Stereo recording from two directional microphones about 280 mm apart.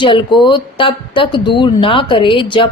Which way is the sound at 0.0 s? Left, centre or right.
Centre.